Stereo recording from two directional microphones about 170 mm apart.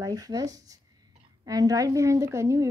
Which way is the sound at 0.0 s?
20° right (ahead or behind).